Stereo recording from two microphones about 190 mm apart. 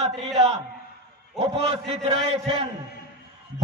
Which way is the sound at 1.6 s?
30° right (ahead or behind).